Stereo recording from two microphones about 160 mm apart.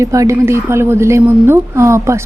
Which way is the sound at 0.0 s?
20° right (ahead or behind).